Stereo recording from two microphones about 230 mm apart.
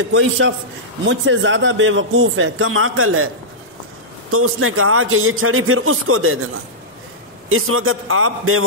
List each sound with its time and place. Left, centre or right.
0.0 s speech: right
4.3 s speech: right
7.4 s speech: right